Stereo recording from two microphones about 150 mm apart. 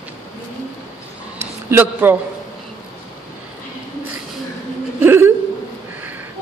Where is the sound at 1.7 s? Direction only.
15° right (ahead or behind).